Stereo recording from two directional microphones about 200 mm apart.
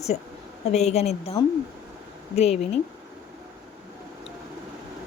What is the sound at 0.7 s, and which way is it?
Speech, 35° left (ahead or behind).